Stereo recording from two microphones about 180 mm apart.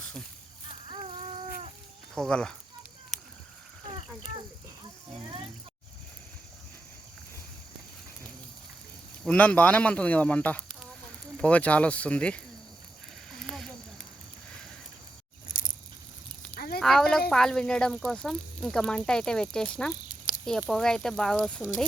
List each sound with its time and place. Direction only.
2.1 s speech: 5° left (ahead or behind)
9.2 s speech: 5° left (ahead or behind)
13.4 s snake: centre (ahead or behind)
16.6 s a sound: 60° left (ahead or behind)
16.8 s speech: 5° left (ahead or behind)